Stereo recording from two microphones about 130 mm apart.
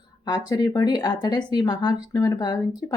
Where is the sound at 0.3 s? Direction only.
30° left (ahead or behind).